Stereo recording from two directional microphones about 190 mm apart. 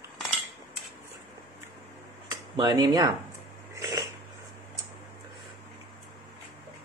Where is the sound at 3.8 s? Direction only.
15° right (ahead or behind).